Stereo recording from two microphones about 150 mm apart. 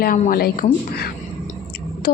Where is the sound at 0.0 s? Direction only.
75° left (ahead or behind).